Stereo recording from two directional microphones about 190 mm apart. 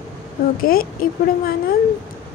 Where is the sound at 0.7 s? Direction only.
50° left (ahead or behind).